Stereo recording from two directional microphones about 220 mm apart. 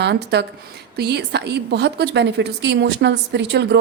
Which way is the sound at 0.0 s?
50° right (ahead or behind).